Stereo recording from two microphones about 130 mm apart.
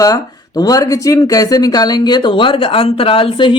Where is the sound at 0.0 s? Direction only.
30° left (ahead or behind).